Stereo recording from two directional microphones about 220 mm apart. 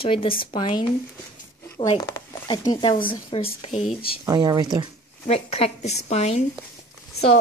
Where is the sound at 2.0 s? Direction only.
15° left (ahead or behind).